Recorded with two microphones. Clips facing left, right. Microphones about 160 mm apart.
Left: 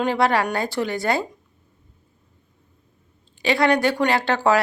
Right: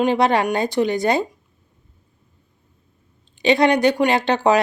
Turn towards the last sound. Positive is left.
turn(degrees=-20)  # may be behind; listen again after turning